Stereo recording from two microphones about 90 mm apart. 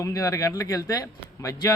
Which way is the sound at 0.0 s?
40° left (ahead or behind).